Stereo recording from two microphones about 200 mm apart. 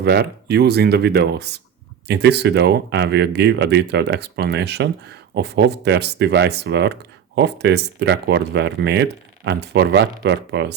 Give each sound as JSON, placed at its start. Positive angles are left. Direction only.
{"t": 0.0, "sound": "speech", "side_deg": -55}